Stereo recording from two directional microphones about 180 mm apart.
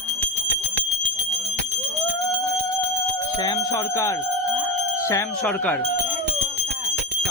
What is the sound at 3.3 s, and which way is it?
Speech, 25° left (ahead or behind).